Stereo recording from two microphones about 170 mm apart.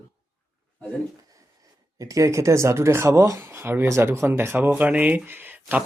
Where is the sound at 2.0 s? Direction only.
20° right (ahead or behind).